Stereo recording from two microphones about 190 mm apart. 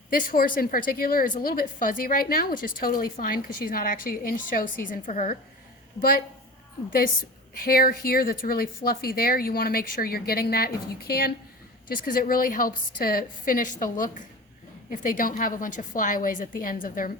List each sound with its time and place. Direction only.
0.1 s speech: 50° left (ahead or behind)
7.6 s speech: 50° left (ahead or behind)